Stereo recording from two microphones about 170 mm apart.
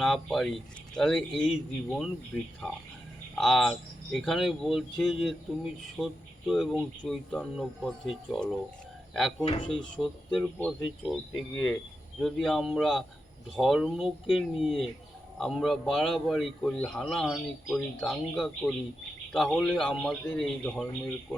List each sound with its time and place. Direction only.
0.0 s a man's voice: centre (ahead or behind)
2.3 s a man's voice: 10° left (ahead or behind)
9.4 s speech: 35° left (ahead or behind)
10.0 s a man's voice: centre (ahead or behind)